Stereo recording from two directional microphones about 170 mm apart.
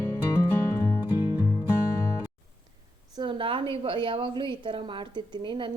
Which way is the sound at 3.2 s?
30° right (ahead or behind).